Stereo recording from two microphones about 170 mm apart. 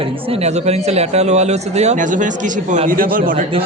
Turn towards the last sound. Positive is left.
turn(degrees=-55)  # may be behind; listen again after turning